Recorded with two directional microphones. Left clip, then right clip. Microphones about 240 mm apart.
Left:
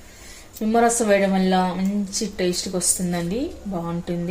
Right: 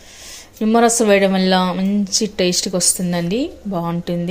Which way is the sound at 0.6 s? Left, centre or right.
Right.